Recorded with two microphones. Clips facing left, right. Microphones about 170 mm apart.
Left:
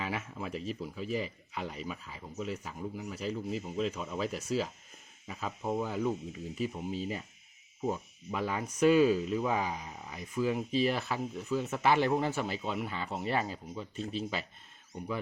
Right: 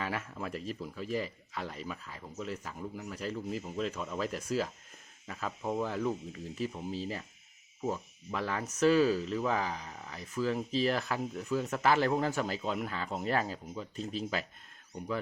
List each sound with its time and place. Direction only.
0.0 s speech: 10° left (ahead or behind)
0.5 s speech: 40° right (ahead or behind)
0.8 s speech: 10° left (ahead or behind)
13.9 s speech: 40° right (ahead or behind)
14.2 s speech: centre (ahead or behind)